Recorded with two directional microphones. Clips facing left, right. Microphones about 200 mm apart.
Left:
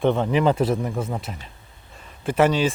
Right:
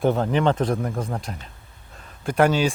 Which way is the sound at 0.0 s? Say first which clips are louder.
Left 1 dB; centre (ahead or behind).